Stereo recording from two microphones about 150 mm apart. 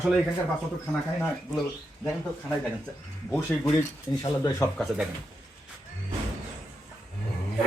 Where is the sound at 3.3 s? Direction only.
15° left (ahead or behind).